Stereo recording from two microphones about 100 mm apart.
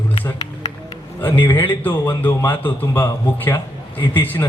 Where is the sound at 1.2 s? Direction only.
20° left (ahead or behind).